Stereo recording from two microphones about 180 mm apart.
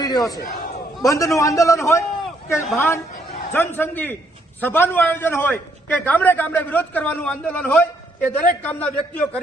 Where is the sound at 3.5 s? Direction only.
10° left (ahead or behind).